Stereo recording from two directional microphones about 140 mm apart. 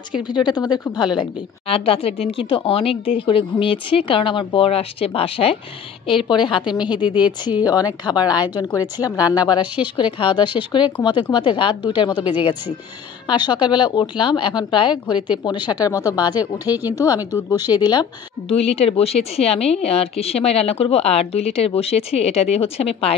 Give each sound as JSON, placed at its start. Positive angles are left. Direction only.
{"t": 0.1, "sound": "a woman's voice", "side_deg": 30}
{"t": 16.6, "sound": "speech", "side_deg": -15}
{"t": 16.9, "sound": "speech", "side_deg": 25}
{"t": 18.5, "sound": "a woman's voice", "side_deg": 45}